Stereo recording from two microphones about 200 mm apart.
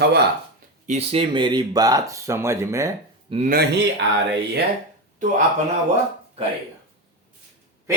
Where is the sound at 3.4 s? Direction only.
55° right (ahead or behind).